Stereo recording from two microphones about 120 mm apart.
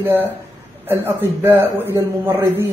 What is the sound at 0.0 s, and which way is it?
A man's voice, 15° right (ahead or behind).